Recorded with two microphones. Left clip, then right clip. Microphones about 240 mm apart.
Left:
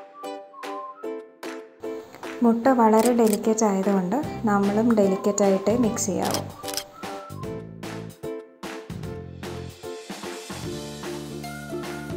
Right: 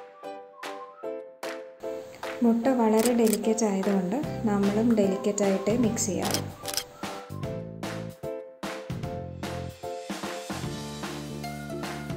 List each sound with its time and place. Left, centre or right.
2.4 s a woman's voice: centre
5.1 s speech: centre
11.4 s music: centre